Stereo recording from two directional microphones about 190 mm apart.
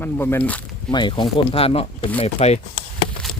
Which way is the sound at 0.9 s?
25° left (ahead or behind).